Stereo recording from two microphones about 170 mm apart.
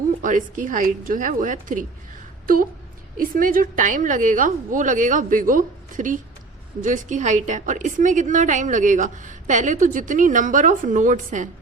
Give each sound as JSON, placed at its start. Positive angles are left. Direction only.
{"t": 0.2, "sound": "a woman's voice", "side_deg": -50}
{"t": 3.2, "sound": "a woman's voice", "side_deg": -55}